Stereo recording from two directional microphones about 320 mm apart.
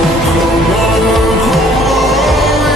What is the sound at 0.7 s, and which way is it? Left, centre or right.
Music, centre.